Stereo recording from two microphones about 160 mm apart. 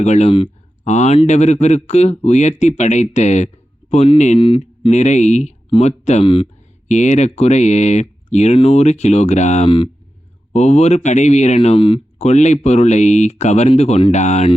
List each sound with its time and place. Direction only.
0.0 s speech: 45° left (ahead or behind)
6.8 s speech: 50° left (ahead or behind)
10.5 s speech: 45° left (ahead or behind)